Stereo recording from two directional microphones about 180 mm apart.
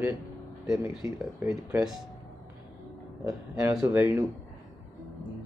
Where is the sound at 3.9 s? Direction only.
10° right (ahead or behind).